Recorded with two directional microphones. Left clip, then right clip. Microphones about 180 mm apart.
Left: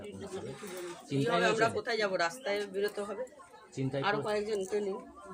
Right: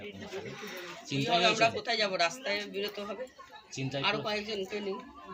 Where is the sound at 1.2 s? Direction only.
15° left (ahead or behind).